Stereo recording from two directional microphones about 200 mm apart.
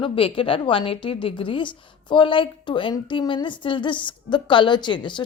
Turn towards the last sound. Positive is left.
turn(degrees=25)  # may be behind; listen again after turning